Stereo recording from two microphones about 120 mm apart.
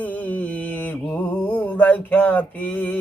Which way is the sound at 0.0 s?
15° left (ahead or behind).